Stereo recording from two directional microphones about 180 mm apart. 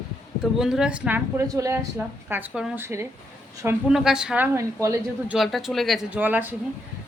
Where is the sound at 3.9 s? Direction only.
5° right (ahead or behind).